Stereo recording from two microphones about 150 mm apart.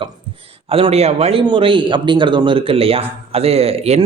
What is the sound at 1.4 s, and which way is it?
A man's voice, 35° right (ahead or behind).